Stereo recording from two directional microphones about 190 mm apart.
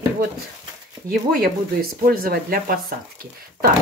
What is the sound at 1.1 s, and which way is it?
Speech, 50° right (ahead or behind).